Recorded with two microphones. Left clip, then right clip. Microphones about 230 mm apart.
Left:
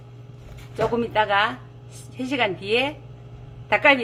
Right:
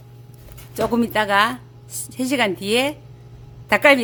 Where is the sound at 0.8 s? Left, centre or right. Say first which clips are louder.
Right 1 dB; right.